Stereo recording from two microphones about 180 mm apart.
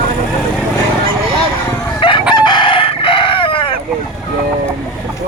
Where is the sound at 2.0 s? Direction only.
25° left (ahead or behind).